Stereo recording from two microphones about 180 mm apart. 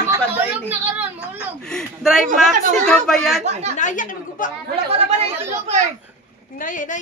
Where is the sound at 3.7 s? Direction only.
45° left (ahead or behind).